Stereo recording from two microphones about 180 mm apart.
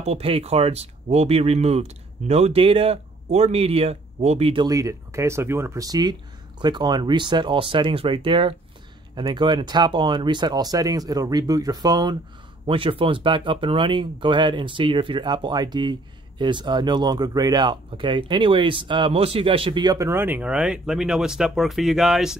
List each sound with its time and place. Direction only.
0.0 s speech: 35° right (ahead or behind)
4.6 s speech: 20° right (ahead or behind); by 22.4 s 5° right (ahead or behind)